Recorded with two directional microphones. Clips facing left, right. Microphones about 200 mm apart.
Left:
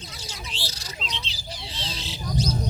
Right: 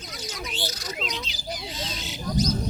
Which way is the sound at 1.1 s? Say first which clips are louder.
Right 4 dB; 30° left (ahead or behind).